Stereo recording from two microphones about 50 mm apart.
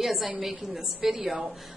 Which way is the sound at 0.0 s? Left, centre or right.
Centre.